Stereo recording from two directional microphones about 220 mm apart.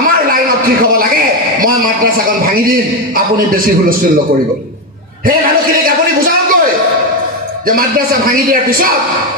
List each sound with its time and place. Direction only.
2.2 s a man's voice: 40° right (ahead or behind)
5.9 s a sound: 40° right (ahead or behind)
7.6 s a man's voice: 40° right (ahead or behind)